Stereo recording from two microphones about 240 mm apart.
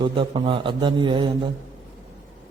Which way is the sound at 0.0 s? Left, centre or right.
Centre.